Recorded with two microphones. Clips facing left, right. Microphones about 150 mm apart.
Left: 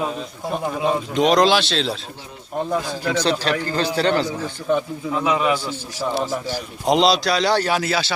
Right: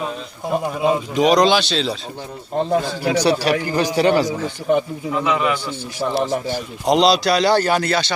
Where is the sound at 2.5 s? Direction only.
25° right (ahead or behind).